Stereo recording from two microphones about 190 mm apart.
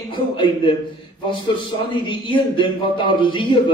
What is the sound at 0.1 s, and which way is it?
A man's voice, 25° left (ahead or behind).